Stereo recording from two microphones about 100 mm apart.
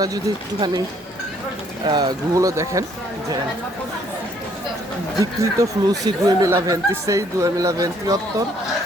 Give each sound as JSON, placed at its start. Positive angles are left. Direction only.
{"t": 0.0, "sound": "speech", "side_deg": -35}
{"t": 1.9, "sound": "speech", "side_deg": -45}
{"t": 5.2, "sound": "speech", "side_deg": -35}